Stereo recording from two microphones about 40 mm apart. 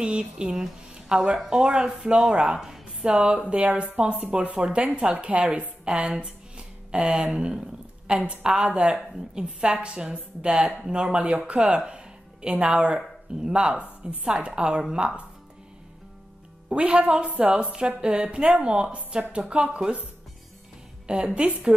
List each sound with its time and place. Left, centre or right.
0.4 s a woman's voice: right
3.4 s a woman's voice: right
6.5 s a sound: right
8.5 s a woman's voice: right
16.6 s a woman's voice: right
21.1 s a woman's voice: right